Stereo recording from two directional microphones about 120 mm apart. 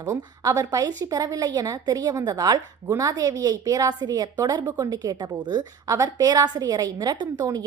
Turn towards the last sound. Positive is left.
turn(degrees=-35)  # may be behind; listen again after turning